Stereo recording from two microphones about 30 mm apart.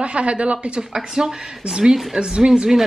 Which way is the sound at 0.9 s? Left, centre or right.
Centre.